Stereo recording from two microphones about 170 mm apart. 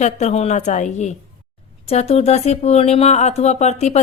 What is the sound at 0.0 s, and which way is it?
Speech, 40° left (ahead or behind).